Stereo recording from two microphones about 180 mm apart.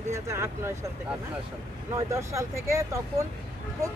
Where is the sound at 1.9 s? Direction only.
15° right (ahead or behind).